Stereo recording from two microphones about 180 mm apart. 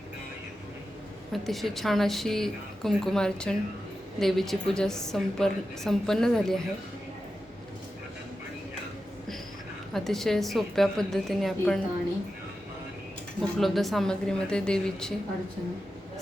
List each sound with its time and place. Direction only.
1.3 s a woman's voice: centre (ahead or behind)
9.9 s a woman's voice: centre (ahead or behind)
13.4 s a woman's voice: centre (ahead or behind)